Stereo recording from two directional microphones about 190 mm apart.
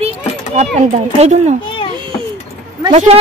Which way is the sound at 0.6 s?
35° right (ahead or behind).